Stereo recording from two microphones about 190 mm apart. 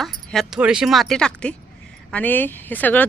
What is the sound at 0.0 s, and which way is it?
Speech, centre (ahead or behind).